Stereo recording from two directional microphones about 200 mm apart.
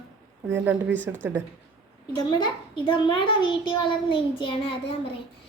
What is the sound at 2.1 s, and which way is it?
A child's voice, 20° left (ahead or behind).